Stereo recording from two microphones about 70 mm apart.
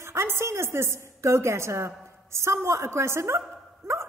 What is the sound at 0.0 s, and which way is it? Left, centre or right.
A woman's voice, right.